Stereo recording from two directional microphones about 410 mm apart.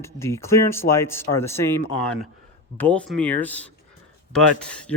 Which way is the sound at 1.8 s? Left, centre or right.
Left.